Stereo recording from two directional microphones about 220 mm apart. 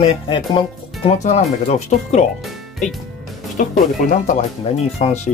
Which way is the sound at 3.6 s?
35° left (ahead or behind).